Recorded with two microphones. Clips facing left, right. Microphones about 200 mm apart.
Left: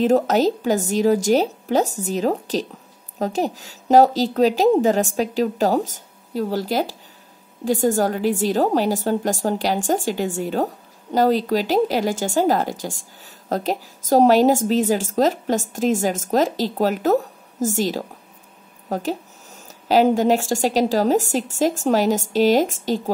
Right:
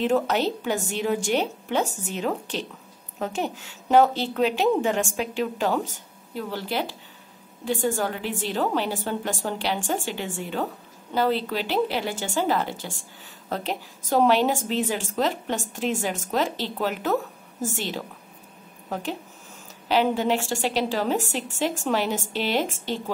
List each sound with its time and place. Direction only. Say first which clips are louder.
0.0 s a woman's voice: left 6 dB; 40° left (ahead or behind)